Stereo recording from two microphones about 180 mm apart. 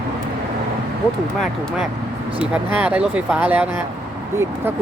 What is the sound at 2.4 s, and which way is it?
Speech, 10° right (ahead or behind).